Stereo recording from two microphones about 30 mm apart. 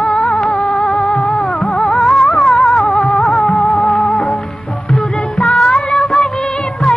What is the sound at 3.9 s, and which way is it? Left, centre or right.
Music, left.